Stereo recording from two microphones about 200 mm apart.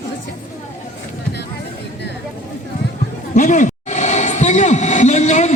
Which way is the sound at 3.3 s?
40° left (ahead or behind).